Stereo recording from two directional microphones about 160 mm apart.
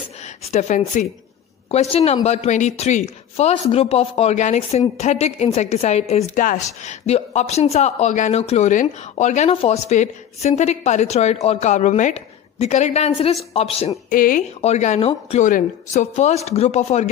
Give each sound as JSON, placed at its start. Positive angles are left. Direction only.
{"t": 0.4, "sound": "speech", "side_deg": 45}
{"t": 1.7, "sound": "speech", "side_deg": 40}
{"t": 14.1, "sound": "speech", "side_deg": 60}
{"t": 14.6, "sound": "speech", "side_deg": 45}